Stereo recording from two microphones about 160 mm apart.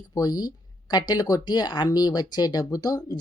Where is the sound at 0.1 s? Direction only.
25° left (ahead or behind).